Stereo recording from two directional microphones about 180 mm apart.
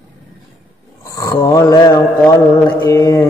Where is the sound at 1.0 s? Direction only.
20° left (ahead or behind).